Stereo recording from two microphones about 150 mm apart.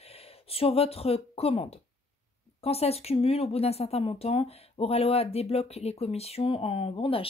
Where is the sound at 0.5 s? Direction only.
40° left (ahead or behind).